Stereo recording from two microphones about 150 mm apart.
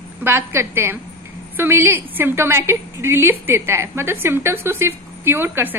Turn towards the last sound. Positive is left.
turn(degrees=-15)  # may be behind; listen again after turning